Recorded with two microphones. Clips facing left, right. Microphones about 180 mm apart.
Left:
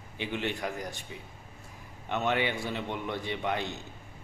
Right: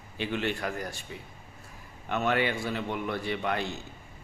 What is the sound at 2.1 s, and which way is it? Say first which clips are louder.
A man's voice: right 2 dB; 20° left (ahead or behind).